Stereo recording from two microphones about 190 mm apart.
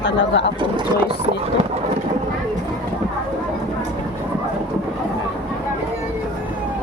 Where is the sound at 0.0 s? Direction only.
70° left (ahead or behind).